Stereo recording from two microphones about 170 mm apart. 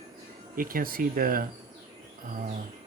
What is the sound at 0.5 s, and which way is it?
Speech, 55° right (ahead or behind).